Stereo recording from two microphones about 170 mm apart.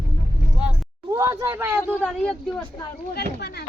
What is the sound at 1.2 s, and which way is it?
Speech, 15° right (ahead or behind).